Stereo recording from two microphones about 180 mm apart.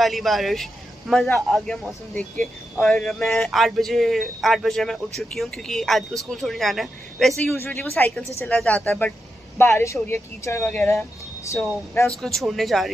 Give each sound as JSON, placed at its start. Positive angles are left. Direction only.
{"t": 0.0, "sound": "a man's voice", "side_deg": 0}
{"t": 12.2, "sound": "a man's voice", "side_deg": 0}